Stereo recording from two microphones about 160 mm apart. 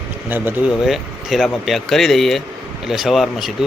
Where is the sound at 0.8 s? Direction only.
Centre (ahead or behind).